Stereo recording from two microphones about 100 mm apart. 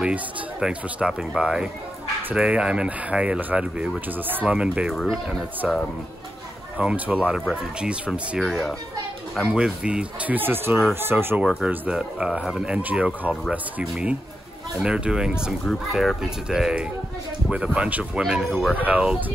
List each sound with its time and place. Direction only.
0.0 s speech: 10° right (ahead or behind)
4.9 s speech: centre (ahead or behind)
5.6 s speech: 10° right (ahead or behind)